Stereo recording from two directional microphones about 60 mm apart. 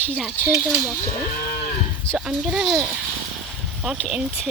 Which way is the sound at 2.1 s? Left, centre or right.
Centre.